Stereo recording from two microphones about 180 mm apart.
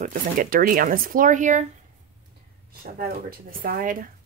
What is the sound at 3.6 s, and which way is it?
Speech, 50° right (ahead or behind).